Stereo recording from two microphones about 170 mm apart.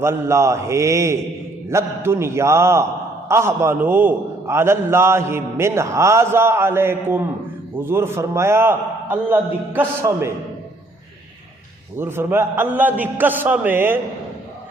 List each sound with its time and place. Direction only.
0.0 s a man's voice: 15° right (ahead or behind)
11.9 s a man's voice: 15° right (ahead or behind)